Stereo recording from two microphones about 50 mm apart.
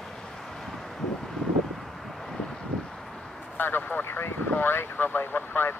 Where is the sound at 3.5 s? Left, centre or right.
Left.